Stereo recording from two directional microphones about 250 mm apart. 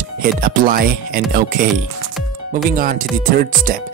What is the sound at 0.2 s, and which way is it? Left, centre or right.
Speech, right.